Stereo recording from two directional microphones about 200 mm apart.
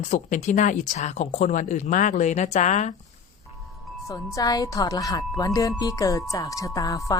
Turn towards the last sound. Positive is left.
turn(degrees=15)  # may be behind; listen again after turning